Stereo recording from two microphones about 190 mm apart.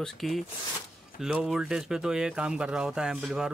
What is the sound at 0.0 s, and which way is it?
Speech, centre (ahead or behind).